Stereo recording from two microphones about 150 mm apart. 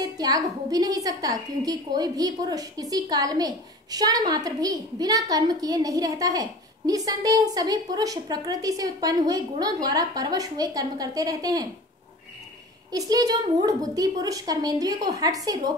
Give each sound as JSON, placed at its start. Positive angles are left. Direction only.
{"t": 0.0, "sound": "a woman's voice", "side_deg": -25}
{"t": 12.9, "sound": "a woman's voice", "side_deg": -25}